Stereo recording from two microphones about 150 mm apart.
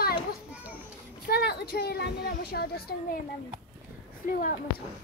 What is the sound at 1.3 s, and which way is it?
Speech, 90° left.